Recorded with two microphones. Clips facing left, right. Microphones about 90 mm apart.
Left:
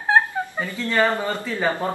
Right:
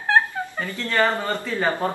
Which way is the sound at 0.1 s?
15° left (ahead or behind).